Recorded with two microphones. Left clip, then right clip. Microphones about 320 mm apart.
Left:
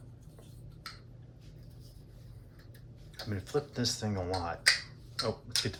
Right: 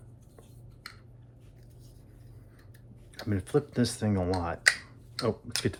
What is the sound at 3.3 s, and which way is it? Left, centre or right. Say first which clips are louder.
Speech: right 6 dB; right.